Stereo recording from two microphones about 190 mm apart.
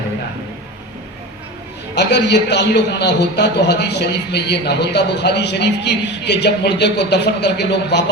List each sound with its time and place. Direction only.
2.0 s a man's voice: 65° left (ahead or behind)